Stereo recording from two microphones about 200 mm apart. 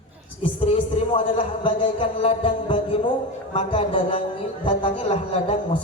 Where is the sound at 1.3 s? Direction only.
30° left (ahead or behind).